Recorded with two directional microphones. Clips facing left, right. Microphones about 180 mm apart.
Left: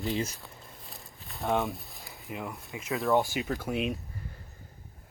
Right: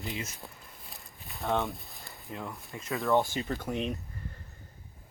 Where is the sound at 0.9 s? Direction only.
Centre (ahead or behind).